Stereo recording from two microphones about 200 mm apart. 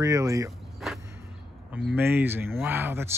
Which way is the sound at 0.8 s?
Centre (ahead or behind).